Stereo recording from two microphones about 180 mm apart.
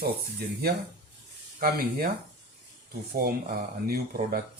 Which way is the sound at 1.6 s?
55° right (ahead or behind).